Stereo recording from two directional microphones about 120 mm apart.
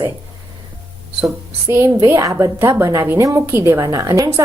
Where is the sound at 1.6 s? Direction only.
25° right (ahead or behind).